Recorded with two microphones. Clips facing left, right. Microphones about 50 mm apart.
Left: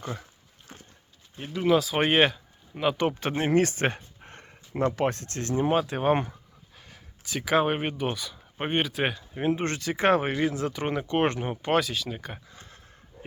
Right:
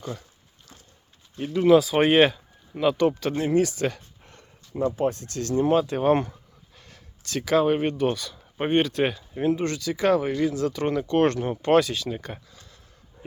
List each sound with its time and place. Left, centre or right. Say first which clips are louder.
0.7 s a sound: left 4 dB; left
1.4 s speech: right 6 dB; centre
3.0 s speech: right 3 dB; left
3.5 s a sound: even; left
4.4 s speech: right 1 dB; left
5.3 s speech: right 6 dB; left
5.8 s speech: right 3 dB; centre
6.7 s a sound: left 1 dB; centre
7.5 s speech: right 3 dB; left
9.4 s speech: right 3 dB; left
10.4 s speech: right 3 dB; left; by 12.4 s centre
12.5 s a sound: left 2 dB; left